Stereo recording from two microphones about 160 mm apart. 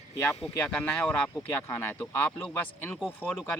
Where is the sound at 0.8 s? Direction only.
5° left (ahead or behind).